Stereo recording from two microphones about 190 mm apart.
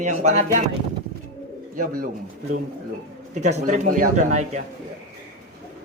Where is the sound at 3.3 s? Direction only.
40° right (ahead or behind).